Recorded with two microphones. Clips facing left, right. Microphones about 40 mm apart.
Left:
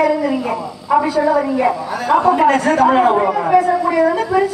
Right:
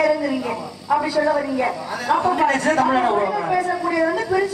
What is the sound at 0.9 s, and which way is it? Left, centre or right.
A woman's voice, centre.